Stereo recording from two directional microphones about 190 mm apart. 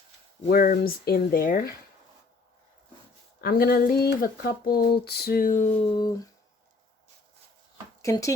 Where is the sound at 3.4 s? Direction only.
55° left (ahead or behind).